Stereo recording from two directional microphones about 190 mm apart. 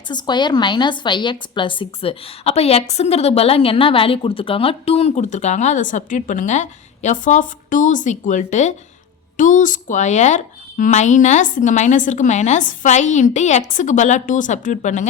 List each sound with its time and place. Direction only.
0.1 s a woman's voice: 25° left (ahead or behind); by 15.0 s 40° left (ahead or behind)